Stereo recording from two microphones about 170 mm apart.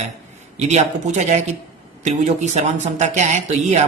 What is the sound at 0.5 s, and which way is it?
Speech, 40° right (ahead or behind).